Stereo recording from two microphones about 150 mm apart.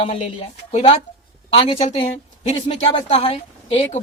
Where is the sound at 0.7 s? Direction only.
45° left (ahead or behind).